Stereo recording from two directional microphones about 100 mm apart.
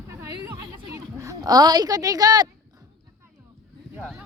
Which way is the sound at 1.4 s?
40° right (ahead or behind).